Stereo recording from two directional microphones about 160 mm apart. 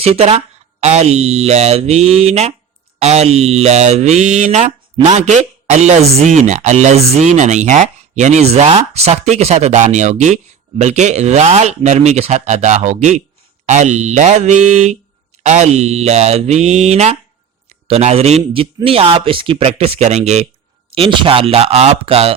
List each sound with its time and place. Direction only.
0.0 s speech: 40° right (ahead or behind)
20.9 s speech: 35° right (ahead or behind)